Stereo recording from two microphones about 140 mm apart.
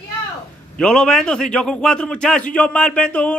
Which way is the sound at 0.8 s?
5° left (ahead or behind).